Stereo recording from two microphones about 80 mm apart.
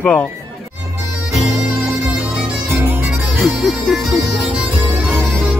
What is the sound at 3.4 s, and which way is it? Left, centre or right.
Speech, centre.